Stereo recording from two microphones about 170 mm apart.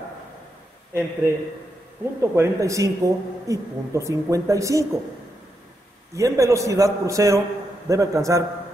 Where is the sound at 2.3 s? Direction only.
20° right (ahead or behind).